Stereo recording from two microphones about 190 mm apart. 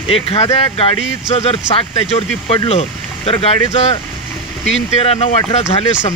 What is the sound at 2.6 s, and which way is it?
Speech, 30° left (ahead or behind).